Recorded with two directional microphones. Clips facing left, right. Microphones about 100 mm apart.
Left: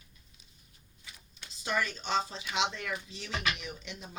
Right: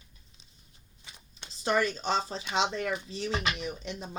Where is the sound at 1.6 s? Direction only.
35° right (ahead or behind).